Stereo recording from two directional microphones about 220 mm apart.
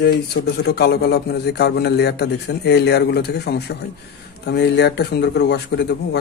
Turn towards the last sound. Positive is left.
turn(degrees=50)  # may be behind; listen again after turning